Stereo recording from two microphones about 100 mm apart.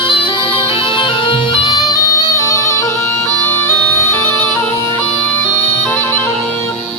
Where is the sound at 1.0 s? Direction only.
55° left (ahead or behind); by 4.5 s 25° left (ahead or behind).